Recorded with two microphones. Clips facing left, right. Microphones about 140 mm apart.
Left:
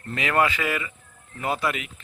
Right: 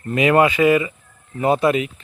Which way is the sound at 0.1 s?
20° right (ahead or behind).